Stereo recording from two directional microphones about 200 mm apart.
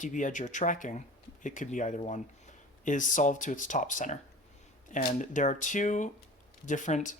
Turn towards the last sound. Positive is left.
turn(degrees=40)  # may be behind; listen again after turning